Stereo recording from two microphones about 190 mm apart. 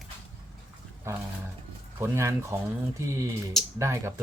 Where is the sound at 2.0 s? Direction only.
15° right (ahead or behind).